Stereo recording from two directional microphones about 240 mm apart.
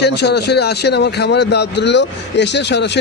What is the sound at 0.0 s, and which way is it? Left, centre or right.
Speech, left.